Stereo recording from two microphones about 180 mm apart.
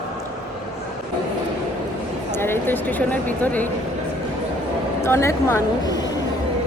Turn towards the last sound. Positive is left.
turn(degrees=20)  # may be behind; listen again after turning